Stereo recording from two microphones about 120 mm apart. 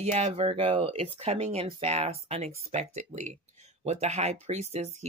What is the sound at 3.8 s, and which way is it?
Speech, 70° right (ahead or behind).